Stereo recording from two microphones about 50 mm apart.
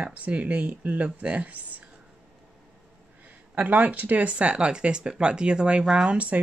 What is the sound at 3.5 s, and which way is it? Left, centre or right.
Speech, right.